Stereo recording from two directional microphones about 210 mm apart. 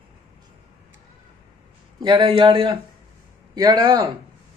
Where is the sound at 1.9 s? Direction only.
20° right (ahead or behind).